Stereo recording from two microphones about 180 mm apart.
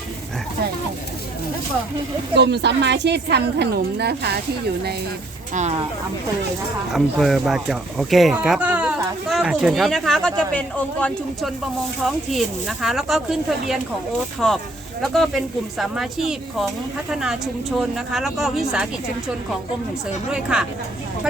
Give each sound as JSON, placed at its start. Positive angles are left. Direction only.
{"t": 2.3, "sound": "a woman's voice", "side_deg": -70}
{"t": 6.9, "sound": "speech", "side_deg": 0}
{"t": 14.4, "sound": "speech", "side_deg": 5}
{"t": 20.3, "sound": "speech", "side_deg": -5}